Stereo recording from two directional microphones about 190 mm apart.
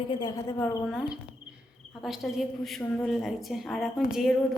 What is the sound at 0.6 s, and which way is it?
Speech, 10° left (ahead or behind).